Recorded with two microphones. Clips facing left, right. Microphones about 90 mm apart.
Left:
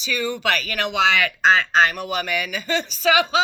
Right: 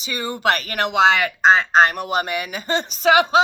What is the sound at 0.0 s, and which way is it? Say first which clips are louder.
Speech: right 2 dB; 35° right (ahead or behind).